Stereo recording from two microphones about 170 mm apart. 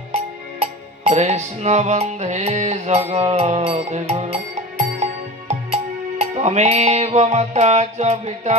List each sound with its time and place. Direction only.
1.0 s music: 40° right (ahead or behind)